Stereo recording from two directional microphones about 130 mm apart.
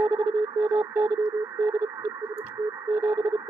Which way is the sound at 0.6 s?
20° right (ahead or behind).